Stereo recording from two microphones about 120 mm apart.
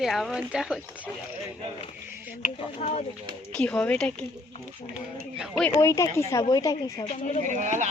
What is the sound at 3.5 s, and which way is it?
Speech, 10° left (ahead or behind).